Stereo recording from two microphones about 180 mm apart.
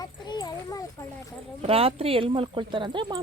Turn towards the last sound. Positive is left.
turn(degrees=-25)  # may be behind; listen again after turning